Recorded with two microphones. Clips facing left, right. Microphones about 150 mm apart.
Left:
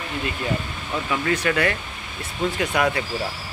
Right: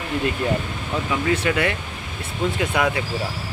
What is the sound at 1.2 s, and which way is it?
Speech, 20° right (ahead or behind).